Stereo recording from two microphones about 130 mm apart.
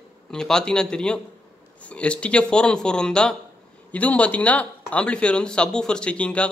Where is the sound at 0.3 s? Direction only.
5° left (ahead or behind).